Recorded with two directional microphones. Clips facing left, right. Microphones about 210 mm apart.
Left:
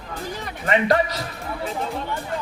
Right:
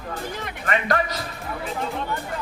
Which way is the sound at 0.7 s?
25° left (ahead or behind).